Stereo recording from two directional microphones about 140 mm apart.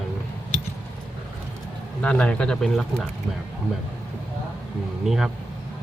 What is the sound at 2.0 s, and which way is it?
Speech, 10° left (ahead or behind).